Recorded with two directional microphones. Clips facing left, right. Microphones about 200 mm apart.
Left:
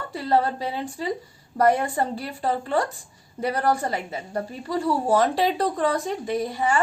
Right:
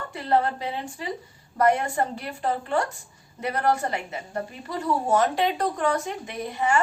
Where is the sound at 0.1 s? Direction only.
35° left (ahead or behind).